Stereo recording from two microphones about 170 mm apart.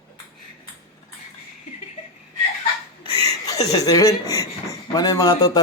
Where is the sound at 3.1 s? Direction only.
20° left (ahead or behind).